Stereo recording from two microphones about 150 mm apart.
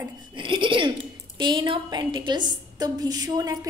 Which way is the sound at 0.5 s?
35° right (ahead or behind).